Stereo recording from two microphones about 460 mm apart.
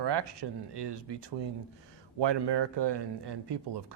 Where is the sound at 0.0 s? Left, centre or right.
Right.